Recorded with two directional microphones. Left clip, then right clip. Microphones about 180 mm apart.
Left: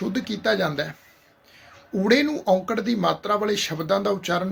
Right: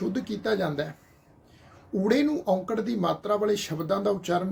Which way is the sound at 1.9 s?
5° left (ahead or behind).